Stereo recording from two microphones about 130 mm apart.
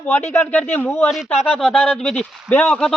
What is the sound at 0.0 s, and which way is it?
Speech, 15° left (ahead or behind).